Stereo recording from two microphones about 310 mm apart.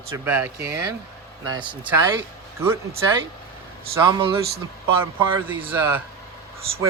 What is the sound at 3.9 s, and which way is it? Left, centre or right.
Speech, centre.